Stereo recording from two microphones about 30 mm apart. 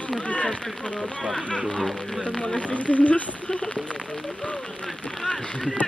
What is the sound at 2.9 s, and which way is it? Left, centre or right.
Speech, left.